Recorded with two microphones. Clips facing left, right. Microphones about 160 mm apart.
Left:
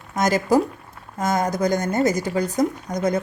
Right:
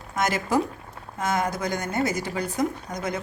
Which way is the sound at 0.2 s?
40° left (ahead or behind).